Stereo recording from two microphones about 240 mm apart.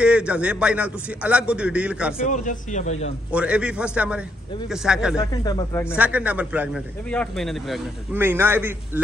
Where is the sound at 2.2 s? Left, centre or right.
Left.